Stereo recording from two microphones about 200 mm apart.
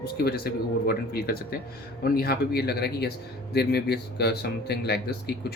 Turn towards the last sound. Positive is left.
turn(degrees=55)  # may be behind; listen again after turning